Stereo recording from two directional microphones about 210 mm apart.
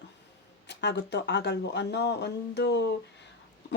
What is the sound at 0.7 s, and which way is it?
A woman's voice, 55° left (ahead or behind).